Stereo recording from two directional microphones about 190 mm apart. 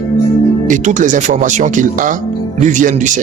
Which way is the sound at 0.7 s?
40° right (ahead or behind).